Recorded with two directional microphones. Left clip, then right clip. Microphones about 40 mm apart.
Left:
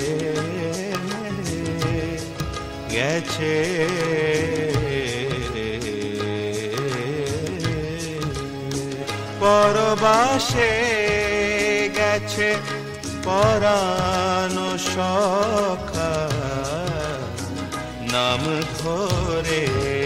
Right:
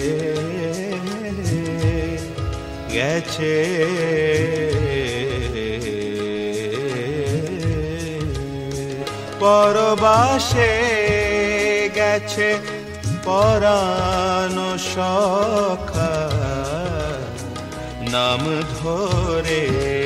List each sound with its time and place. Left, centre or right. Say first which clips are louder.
2.9 s music: right 2 dB; right
9.4 s music: right 2 dB; centre
18.1 s music: right 2 dB; right